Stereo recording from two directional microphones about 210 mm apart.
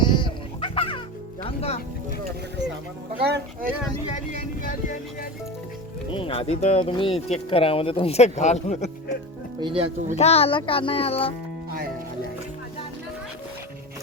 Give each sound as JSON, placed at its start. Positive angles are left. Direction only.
{"t": 0.0, "sound": "fowl", "side_deg": 20}
{"t": 1.5, "sound": "speech", "side_deg": 30}
{"t": 3.2, "sound": "speech", "side_deg": -50}
{"t": 4.3, "sound": "music", "side_deg": 40}
{"t": 6.1, "sound": "speech", "side_deg": 25}
{"t": 9.6, "sound": "speech", "side_deg": -25}
{"t": 10.2, "sound": "speech", "side_deg": 30}